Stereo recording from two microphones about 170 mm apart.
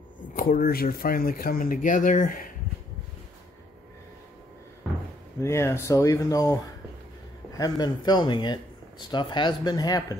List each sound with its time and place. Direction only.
0.4 s speech: 55° left (ahead or behind)
5.4 s speech: 15° left (ahead or behind)